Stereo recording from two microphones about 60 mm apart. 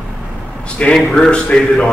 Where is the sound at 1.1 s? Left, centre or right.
Centre.